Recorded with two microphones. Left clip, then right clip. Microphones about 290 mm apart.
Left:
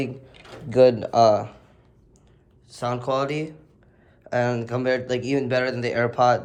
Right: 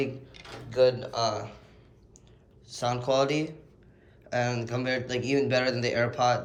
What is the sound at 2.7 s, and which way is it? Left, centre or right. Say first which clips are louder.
Speech: left 2 dB; centre.